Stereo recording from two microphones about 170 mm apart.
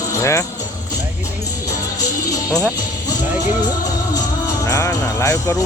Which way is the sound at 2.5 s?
10° right (ahead or behind).